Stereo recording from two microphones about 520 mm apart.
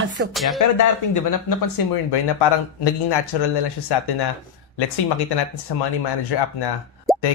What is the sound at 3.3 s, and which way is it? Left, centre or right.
Speech, left.